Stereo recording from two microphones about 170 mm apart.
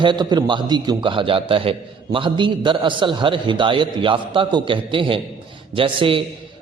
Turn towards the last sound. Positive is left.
turn(degrees=-30)  # may be behind; listen again after turning